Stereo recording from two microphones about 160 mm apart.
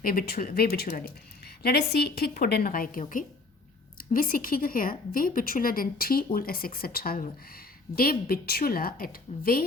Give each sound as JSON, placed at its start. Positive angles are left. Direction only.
{"t": 0.0, "sound": "a woman's voice", "side_deg": 65}